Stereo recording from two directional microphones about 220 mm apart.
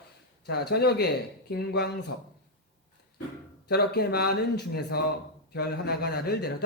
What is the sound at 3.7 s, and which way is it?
A man's voice, 45° left (ahead or behind).